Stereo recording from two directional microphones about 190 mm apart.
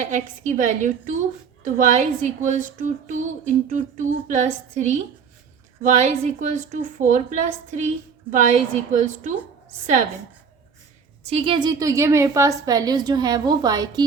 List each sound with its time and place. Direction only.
0.1 s a woman's voice: 40° right (ahead or behind)
6.0 s a woman's voice: 40° right (ahead or behind)
11.2 s a woman's voice: 35° right (ahead or behind)